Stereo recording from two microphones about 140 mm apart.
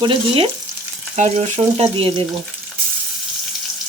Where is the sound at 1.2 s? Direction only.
55° right (ahead or behind).